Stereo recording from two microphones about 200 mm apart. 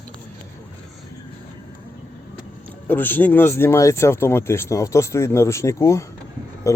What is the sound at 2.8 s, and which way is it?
Speech, 10° left (ahead or behind).